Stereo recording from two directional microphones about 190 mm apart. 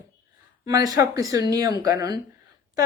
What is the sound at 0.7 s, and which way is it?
Speech, 20° right (ahead or behind).